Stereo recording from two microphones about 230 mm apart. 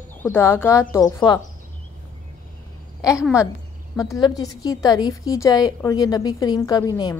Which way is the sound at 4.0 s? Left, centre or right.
Centre.